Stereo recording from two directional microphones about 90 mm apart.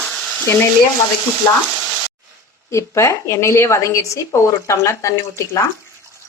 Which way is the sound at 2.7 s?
30° left (ahead or behind).